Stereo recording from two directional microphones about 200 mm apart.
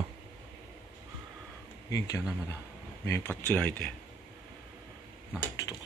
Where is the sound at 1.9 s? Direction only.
15° left (ahead or behind).